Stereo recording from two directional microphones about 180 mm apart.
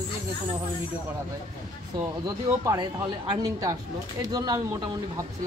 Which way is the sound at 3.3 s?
20° right (ahead or behind).